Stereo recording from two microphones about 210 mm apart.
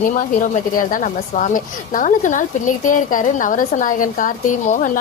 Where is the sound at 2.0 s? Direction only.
40° left (ahead or behind).